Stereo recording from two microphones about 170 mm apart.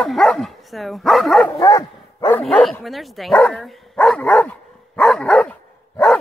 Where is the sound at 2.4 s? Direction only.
Centre (ahead or behind).